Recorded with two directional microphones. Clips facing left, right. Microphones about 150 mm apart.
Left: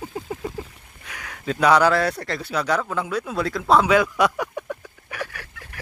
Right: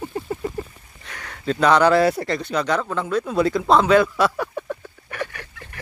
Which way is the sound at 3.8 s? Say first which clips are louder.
Right 2 dB; 10° left (ahead or behind).